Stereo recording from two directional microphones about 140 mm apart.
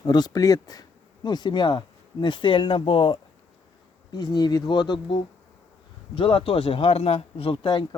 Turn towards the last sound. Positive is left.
turn(degrees=35)  # may be behind; listen again after turning